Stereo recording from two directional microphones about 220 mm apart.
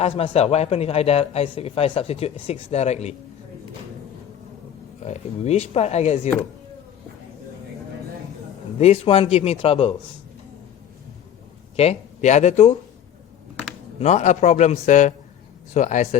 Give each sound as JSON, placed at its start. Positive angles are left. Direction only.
{"t": 0.2, "sound": "speech", "side_deg": 30}
{"t": 5.0, "sound": "speech", "side_deg": 30}
{"t": 8.8, "sound": "speech", "side_deg": 25}
{"t": 11.8, "sound": "a man's voice", "side_deg": 30}
{"t": 14.0, "sound": "a man's voice", "side_deg": 30}